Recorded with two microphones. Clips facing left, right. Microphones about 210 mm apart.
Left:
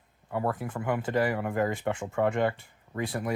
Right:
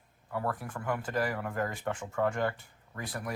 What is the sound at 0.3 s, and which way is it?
Speech, 25° left (ahead or behind).